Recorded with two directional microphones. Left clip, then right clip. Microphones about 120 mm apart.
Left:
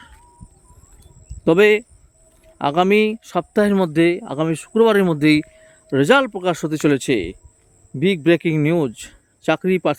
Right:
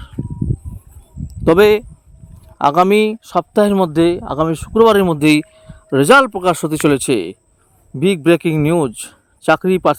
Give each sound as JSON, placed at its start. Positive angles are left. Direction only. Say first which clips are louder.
{"t": 1.3, "sound": "speech", "louder": "right 3 dB", "side_deg": -30}
{"t": 5.3, "sound": "speech", "louder": "right 3 dB", "side_deg": -35}